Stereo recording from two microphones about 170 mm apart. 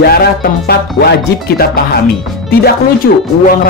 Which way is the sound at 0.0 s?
65° left (ahead or behind).